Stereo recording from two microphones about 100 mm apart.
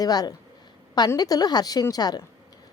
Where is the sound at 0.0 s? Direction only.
40° left (ahead or behind).